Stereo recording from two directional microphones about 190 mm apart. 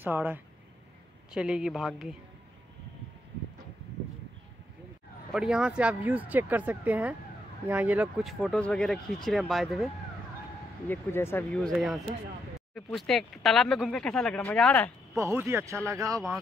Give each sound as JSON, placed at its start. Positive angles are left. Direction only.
{"t": 0.0, "sound": "speech", "side_deg": -10}
{"t": 5.3, "sound": "speech", "side_deg": -5}
{"t": 10.9, "sound": "speech", "side_deg": 10}
{"t": 15.1, "sound": "speech", "side_deg": -15}